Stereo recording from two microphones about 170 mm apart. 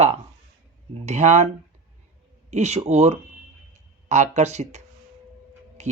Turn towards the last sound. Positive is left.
turn(degrees=-40)  # may be behind; listen again after turning